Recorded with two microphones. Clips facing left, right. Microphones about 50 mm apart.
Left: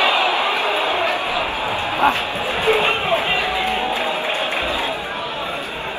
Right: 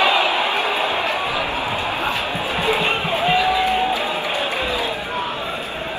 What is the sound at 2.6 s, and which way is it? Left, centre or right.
Music, left.